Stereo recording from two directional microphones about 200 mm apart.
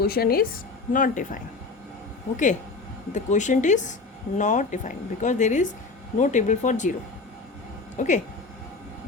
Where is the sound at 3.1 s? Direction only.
40° left (ahead or behind).